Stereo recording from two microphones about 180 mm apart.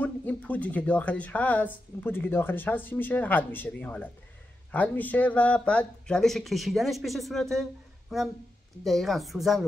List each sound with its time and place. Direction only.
0.0 s speech: 10° left (ahead or behind)